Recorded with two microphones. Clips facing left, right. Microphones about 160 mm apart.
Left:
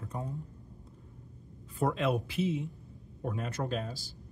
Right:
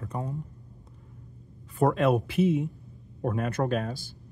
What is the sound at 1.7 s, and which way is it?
Speech, 60° right (ahead or behind).